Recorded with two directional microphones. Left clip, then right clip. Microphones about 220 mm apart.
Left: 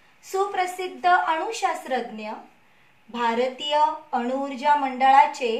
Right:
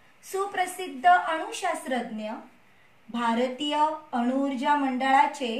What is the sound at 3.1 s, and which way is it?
A woman's voice, 25° left (ahead or behind).